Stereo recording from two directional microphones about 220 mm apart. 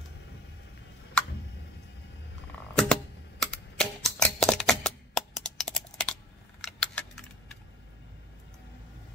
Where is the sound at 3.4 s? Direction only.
5° left (ahead or behind).